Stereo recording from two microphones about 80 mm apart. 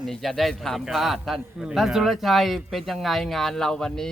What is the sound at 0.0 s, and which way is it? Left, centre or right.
Speech, centre.